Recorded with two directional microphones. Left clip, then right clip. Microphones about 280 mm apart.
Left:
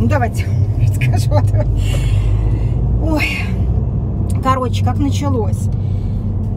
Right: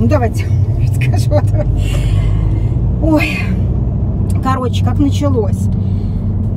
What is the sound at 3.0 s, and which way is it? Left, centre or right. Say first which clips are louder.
Speech: right 5 dB; centre.